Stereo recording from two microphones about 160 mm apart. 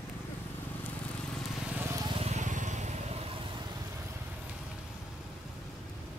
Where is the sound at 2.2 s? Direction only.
45° right (ahead or behind).